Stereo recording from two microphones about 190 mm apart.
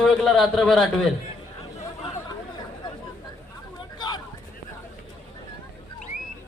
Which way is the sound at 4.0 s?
25° left (ahead or behind).